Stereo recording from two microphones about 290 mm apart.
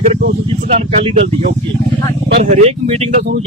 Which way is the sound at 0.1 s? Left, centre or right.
Right.